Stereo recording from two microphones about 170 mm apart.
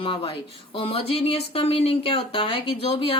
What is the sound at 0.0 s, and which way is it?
Speech, 30° left (ahead or behind).